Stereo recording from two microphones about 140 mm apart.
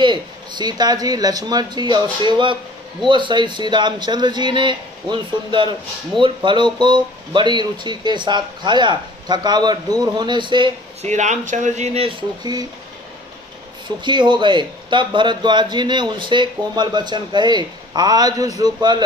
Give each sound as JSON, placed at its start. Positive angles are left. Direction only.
{"t": 0.0, "sound": "speech", "side_deg": -35}
{"t": 11.0, "sound": "speech", "side_deg": -55}
{"t": 13.8, "sound": "speech", "side_deg": -35}